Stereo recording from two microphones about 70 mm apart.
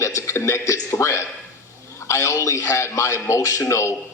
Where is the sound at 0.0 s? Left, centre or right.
Left.